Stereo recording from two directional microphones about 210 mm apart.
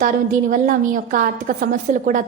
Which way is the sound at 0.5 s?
40° right (ahead or behind).